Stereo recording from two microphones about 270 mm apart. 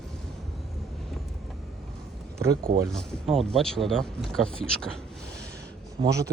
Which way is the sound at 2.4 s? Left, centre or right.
Right.